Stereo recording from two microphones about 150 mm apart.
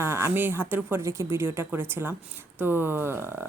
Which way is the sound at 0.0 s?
15° right (ahead or behind).